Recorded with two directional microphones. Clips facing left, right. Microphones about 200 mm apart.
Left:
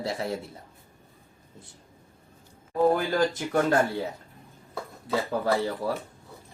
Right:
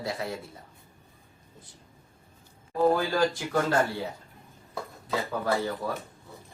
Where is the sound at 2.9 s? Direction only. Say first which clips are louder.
Left 1 dB; 20° left (ahead or behind).